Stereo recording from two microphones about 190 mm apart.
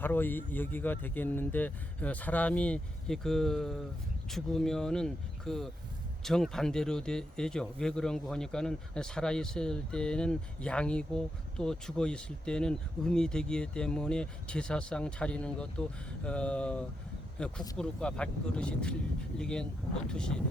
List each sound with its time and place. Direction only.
0.0 s speech: 10° left (ahead or behind)